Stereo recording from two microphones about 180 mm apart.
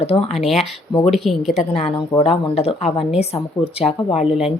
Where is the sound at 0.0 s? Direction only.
35° left (ahead or behind).